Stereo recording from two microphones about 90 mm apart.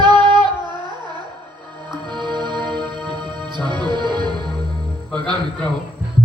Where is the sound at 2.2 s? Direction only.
60° right (ahead or behind).